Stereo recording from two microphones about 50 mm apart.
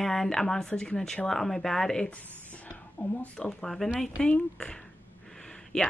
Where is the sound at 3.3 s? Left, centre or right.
Centre.